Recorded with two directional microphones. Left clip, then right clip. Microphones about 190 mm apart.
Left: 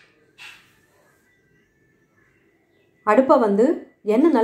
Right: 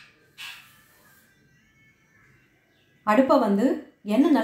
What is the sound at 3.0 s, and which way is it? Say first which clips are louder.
A woman's voice: left 4 dB; 20° left (ahead or behind).